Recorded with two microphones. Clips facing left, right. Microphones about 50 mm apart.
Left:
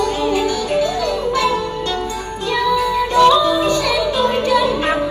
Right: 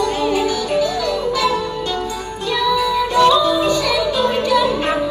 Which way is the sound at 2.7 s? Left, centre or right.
Left.